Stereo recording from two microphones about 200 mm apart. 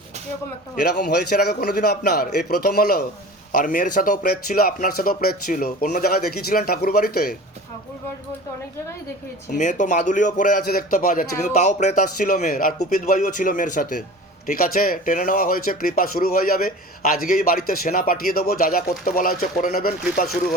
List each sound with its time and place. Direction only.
0.9 s speech: 50° left (ahead or behind)
9.5 s a man's voice: 40° left (ahead or behind)